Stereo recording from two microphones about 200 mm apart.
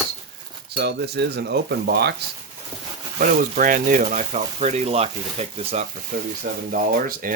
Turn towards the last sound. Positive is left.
turn(degrees=-45)  # may be behind; listen again after turning